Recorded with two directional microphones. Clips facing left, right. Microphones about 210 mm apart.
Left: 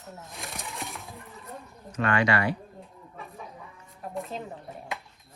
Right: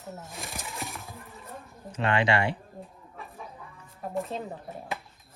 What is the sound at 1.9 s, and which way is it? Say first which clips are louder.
Speech: even; 30° right (ahead or behind).